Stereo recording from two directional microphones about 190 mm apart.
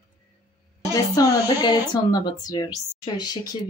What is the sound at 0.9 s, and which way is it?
Speech, 20° left (ahead or behind).